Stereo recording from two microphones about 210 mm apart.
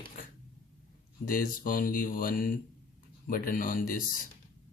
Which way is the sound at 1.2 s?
40° left (ahead or behind).